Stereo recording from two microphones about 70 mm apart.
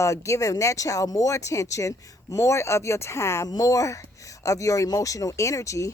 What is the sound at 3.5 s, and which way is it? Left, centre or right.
Speech, left.